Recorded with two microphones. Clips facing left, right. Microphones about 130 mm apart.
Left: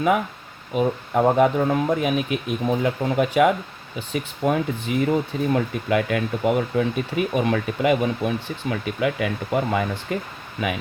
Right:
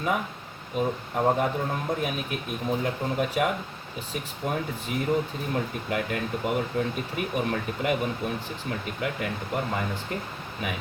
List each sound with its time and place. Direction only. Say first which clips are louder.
0.8 s speech: left 6 dB; 85° left